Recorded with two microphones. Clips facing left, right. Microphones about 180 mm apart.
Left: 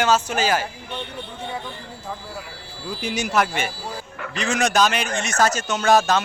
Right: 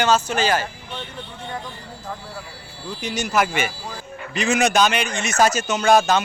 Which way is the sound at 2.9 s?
5° left (ahead or behind).